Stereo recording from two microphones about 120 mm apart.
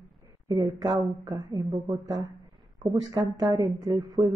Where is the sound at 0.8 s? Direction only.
30° right (ahead or behind).